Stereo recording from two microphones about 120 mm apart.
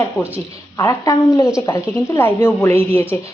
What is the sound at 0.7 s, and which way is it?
Speech, 30° left (ahead or behind).